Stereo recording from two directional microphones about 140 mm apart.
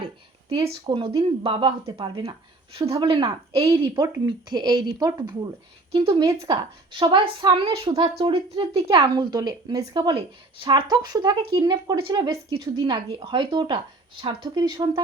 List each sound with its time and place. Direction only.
0.6 s speech: 40° right (ahead or behind); by 6.4 s 20° right (ahead or behind)
6.4 s speech: 35° right (ahead or behind)